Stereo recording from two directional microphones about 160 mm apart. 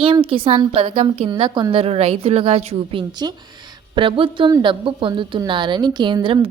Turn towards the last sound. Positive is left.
turn(degrees=-30)  # may be behind; listen again after turning